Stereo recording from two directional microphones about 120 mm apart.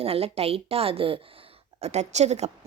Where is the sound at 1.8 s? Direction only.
65° right (ahead or behind).